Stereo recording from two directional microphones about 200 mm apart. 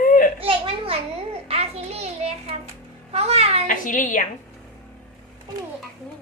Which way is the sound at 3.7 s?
40° left (ahead or behind).